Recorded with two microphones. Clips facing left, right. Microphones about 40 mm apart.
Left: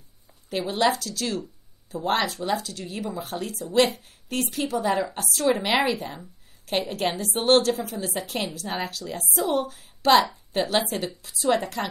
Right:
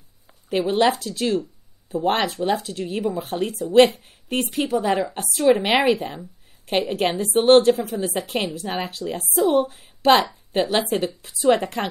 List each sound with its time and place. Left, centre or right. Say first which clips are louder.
0.5 s a woman's voice: right 4 dB; right
4.3 s speech: right 4 dB; right
5.1 s a woman's voice: right 6 dB; right
6.6 s a woman's voice: right 4 dB; right
9.6 s a woman's voice: right 6 dB; right